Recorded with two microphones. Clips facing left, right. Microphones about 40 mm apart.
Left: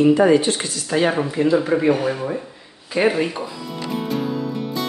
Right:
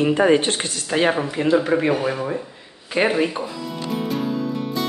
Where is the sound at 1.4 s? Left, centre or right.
Centre.